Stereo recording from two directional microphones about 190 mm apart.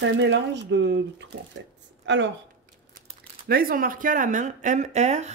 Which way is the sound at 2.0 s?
70° right (ahead or behind).